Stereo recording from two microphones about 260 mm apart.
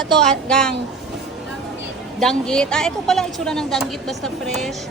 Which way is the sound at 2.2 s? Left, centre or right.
Centre.